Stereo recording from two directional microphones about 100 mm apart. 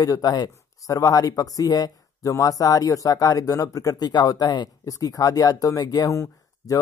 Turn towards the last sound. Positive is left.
turn(degrees=35)  # may be behind; listen again after turning